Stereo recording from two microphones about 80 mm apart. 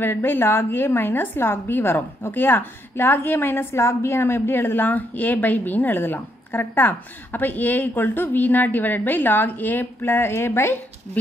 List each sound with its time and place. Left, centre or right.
0.0 s a woman's voice: left